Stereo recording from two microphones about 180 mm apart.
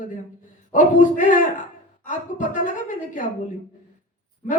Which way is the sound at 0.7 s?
45° left (ahead or behind).